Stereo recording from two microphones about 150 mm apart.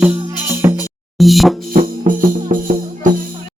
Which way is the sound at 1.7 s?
65° right (ahead or behind).